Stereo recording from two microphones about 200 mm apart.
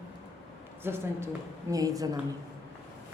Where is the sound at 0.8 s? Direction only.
10° right (ahead or behind).